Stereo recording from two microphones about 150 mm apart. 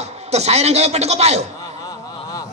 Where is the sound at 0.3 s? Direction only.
45° right (ahead or behind).